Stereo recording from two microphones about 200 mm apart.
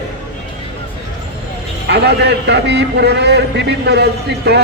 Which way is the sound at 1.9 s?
55° right (ahead or behind).